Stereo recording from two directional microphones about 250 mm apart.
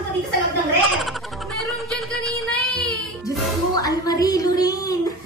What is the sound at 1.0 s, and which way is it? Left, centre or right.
Music, centre.